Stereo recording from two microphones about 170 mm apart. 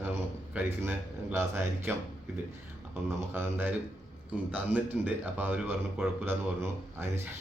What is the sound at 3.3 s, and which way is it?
Speech, 10° right (ahead or behind).